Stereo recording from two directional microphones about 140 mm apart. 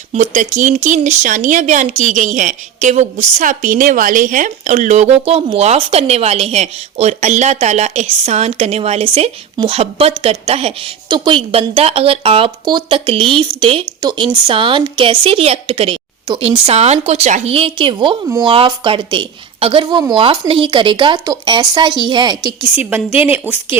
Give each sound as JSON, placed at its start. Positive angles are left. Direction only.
{"t": 0.1, "sound": "a woman's voice", "side_deg": -60}
{"t": 12.6, "sound": "speech", "side_deg": -30}
{"t": 14.0, "sound": "speech", "side_deg": -30}
{"t": 23.2, "sound": "speech", "side_deg": -10}